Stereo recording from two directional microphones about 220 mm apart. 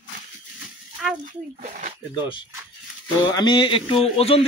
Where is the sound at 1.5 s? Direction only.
40° right (ahead or behind).